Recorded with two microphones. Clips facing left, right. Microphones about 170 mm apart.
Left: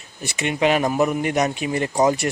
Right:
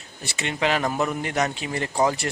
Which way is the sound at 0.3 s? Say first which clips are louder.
Left 5 dB; 15° left (ahead or behind).